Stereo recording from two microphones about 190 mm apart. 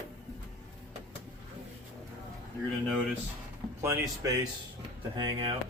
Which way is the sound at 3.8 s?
15° right (ahead or behind).